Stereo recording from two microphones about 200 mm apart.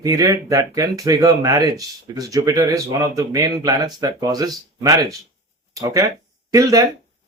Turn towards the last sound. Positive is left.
turn(degrees=-15)  # may be behind; listen again after turning